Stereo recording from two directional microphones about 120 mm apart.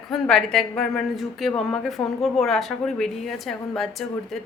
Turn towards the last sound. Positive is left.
turn(degrees=0)  # may be behind; listen again after turning